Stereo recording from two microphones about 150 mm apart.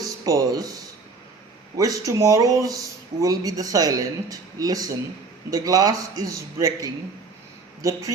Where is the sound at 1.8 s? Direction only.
20° right (ahead or behind).